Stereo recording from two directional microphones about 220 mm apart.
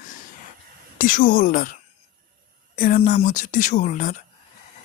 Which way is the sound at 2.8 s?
40° left (ahead or behind).